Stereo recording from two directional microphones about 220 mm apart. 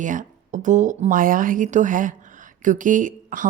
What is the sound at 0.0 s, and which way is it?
A woman's voice, 35° right (ahead or behind).